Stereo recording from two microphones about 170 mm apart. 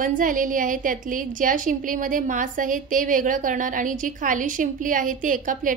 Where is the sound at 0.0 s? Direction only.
50° right (ahead or behind).